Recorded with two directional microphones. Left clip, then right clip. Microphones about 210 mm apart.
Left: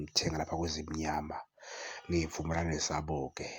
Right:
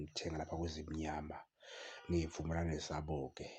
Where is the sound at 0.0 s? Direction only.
20° left (ahead or behind).